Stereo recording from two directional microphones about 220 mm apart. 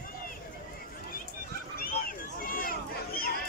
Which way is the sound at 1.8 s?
40° left (ahead or behind).